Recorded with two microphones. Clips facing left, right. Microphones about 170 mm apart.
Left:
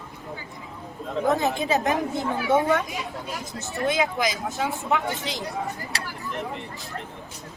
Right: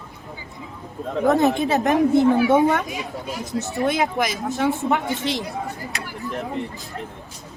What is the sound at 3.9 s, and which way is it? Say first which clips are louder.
Speech: even; 55° right (ahead or behind).